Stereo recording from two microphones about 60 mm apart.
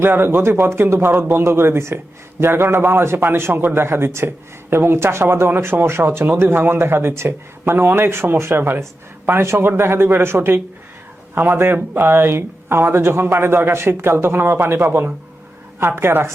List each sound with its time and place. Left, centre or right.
0.0 s a man's voice: right